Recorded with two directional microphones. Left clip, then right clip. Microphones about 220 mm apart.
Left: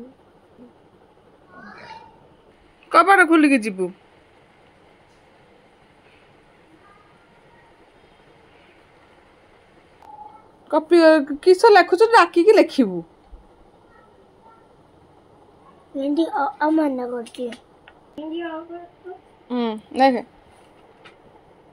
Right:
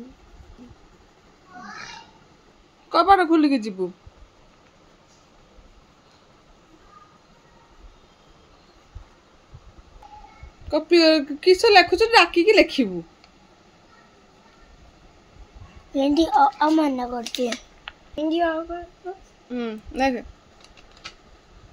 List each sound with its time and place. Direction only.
2.9 s a woman's voice: 10° left (ahead or behind)
10.7 s a woman's voice: 5° left (ahead or behind)
16.0 s a woman's voice: 30° right (ahead or behind)
17.3 s a sound: 40° right (ahead or behind)
19.5 s a woman's voice: 5° left (ahead or behind)